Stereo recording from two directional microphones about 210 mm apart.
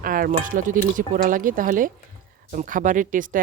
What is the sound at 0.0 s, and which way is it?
Speech, 40° right (ahead or behind).